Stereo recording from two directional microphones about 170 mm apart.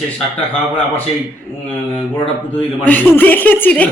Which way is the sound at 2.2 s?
5° left (ahead or behind).